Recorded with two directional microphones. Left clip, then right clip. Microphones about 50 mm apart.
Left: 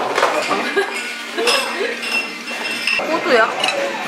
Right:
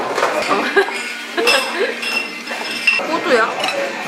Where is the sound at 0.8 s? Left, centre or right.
Right.